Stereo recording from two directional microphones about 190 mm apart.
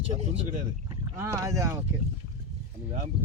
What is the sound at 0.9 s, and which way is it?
Speech, 15° right (ahead or behind).